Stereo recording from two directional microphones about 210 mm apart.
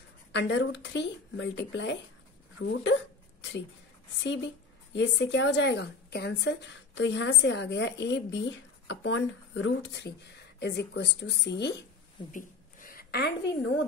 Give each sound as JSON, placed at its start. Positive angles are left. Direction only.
{"t": 0.3, "sound": "a woman's voice", "side_deg": 55}
{"t": 2.8, "sound": "hiccup", "side_deg": 60}
{"t": 4.2, "sound": "a woman's voice", "side_deg": 60}
{"t": 12.3, "sound": "a woman's voice", "side_deg": 40}